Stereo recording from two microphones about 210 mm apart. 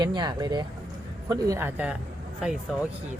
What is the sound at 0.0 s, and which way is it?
A man's voice, 20° right (ahead or behind).